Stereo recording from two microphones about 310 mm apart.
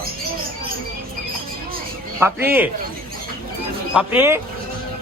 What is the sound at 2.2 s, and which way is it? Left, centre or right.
Speech, centre.